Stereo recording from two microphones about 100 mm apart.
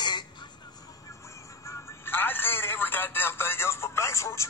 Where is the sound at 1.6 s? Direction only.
25° left (ahead or behind).